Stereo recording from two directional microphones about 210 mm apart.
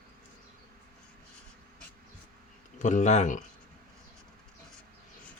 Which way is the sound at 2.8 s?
35° left (ahead or behind).